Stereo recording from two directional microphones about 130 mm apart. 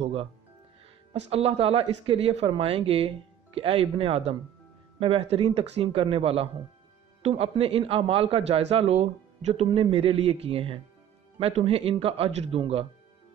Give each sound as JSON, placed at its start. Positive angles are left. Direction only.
{"t": 0.0, "sound": "a man's voice", "side_deg": -45}